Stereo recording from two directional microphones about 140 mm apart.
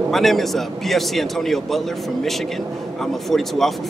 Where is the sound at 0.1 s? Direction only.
Centre (ahead or behind).